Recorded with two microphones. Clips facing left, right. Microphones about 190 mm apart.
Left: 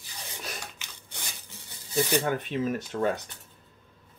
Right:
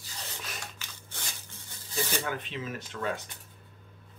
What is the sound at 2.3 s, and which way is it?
Speech, 45° left (ahead or behind).